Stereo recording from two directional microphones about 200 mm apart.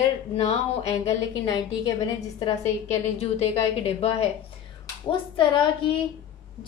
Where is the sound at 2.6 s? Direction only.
30° left (ahead or behind).